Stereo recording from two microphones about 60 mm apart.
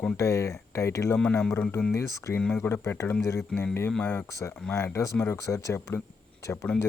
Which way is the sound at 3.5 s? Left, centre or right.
Centre.